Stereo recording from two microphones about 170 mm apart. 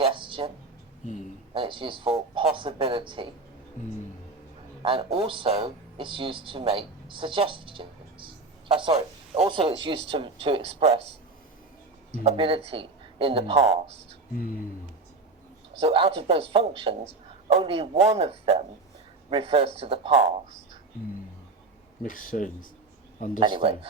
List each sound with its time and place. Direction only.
0.0 s a sound: 30° right (ahead or behind)
1.5 s a man's voice: 30° right (ahead or behind)
4.8 s speech: 35° right (ahead or behind)
12.1 s speech: 40° right (ahead or behind)
14.3 s speech: 55° left (ahead or behind)
15.8 s speech: 35° right (ahead or behind)
22.0 s speech: 50° left (ahead or behind)
23.4 s a man's voice: 30° right (ahead or behind)